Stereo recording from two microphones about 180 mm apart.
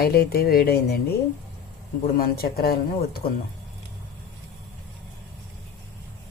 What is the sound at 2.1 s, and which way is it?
Speech, 60° left (ahead or behind).